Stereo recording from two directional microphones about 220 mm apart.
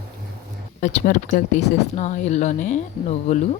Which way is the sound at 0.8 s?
35° left (ahead or behind).